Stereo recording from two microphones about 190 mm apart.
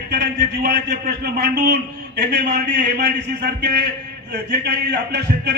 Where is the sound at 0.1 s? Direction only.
60° right (ahead or behind).